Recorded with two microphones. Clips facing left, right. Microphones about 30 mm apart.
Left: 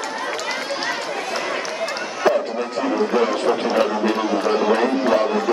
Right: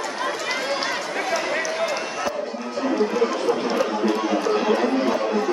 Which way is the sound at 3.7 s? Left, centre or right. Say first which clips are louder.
Left 3 dB; left.